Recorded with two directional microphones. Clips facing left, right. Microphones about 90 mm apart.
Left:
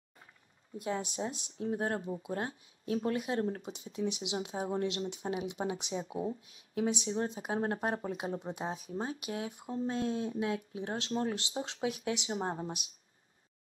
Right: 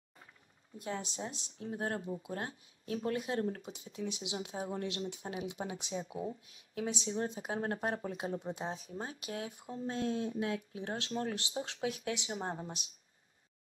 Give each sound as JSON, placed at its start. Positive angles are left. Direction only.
{"t": 0.8, "sound": "a woman's voice", "side_deg": 25}